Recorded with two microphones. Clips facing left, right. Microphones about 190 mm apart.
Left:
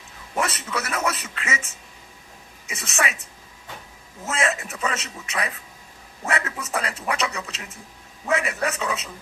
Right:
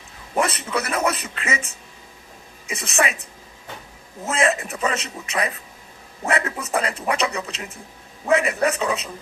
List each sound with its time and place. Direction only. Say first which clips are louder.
0.3 s speech: right 4 dB; 30° right (ahead or behind)
2.6 s speech: right 4 dB; 30° right (ahead or behind)
4.3 s speech: right 4 dB; 30° right (ahead or behind)